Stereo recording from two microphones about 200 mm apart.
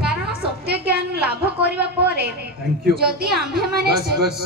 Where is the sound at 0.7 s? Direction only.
55° right (ahead or behind).